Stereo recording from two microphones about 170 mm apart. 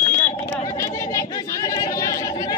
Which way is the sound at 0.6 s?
20° left (ahead or behind).